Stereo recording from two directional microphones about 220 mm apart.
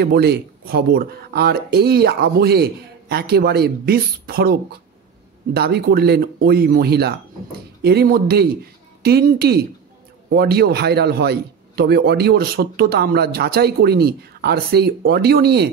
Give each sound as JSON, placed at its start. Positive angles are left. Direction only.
{"t": 0.0, "sound": "a man's voice", "side_deg": -45}